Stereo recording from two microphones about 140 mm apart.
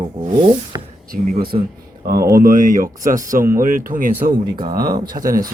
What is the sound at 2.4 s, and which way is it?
Speech, 70° right (ahead or behind).